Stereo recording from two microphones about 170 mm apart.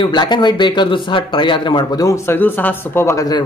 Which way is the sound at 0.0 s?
25° left (ahead or behind).